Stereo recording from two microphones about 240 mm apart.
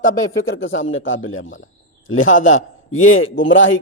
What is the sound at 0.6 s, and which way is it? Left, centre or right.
A man's voice, left.